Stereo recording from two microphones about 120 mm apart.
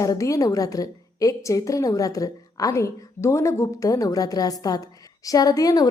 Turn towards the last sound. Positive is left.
turn(degrees=30)  # may be behind; listen again after turning